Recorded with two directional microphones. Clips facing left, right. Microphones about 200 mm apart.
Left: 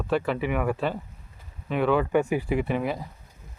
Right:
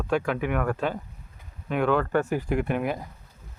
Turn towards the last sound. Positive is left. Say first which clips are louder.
# even
turn(degrees=0)  # may be behind; listen again after turning